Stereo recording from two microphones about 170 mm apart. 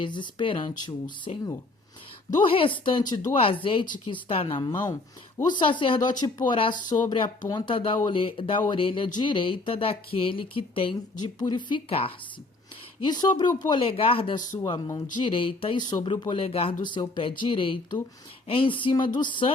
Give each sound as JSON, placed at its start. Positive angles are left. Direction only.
{"t": 0.0, "sound": "speech", "side_deg": 30}